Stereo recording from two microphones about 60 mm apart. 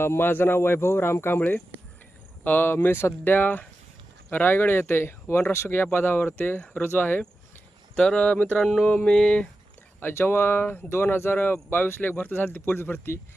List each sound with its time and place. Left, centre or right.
0.0 s speech: left
1.4 s speech: left
7.9 s speech: centre
8.6 s a sound: centre
9.0 s speech: centre
10.0 s speech: left